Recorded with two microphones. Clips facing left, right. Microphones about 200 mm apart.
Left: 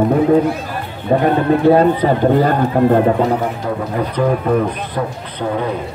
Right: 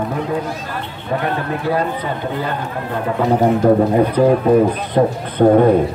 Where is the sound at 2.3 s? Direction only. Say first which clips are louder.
Left 9 dB; 45° left (ahead or behind).